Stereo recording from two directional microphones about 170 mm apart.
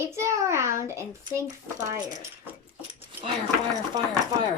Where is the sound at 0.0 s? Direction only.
15° right (ahead or behind).